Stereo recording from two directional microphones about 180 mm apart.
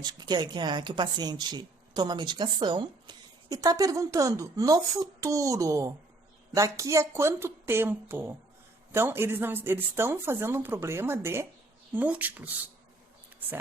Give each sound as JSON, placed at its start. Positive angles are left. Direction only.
{"t": 0.0, "sound": "speech", "side_deg": -25}